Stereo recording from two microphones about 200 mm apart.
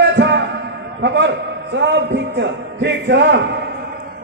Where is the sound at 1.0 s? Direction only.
60° right (ahead or behind).